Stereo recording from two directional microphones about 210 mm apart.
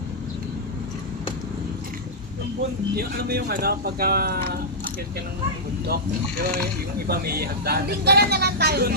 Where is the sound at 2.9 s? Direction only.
45° right (ahead or behind).